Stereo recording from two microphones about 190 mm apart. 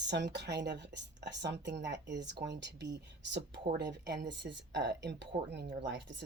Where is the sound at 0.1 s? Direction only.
65° right (ahead or behind).